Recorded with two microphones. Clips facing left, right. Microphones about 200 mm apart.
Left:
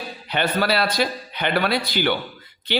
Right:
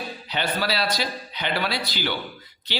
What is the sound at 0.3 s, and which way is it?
A man's voice, 55° left (ahead or behind).